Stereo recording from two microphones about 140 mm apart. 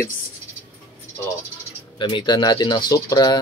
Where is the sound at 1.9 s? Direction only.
30° left (ahead or behind).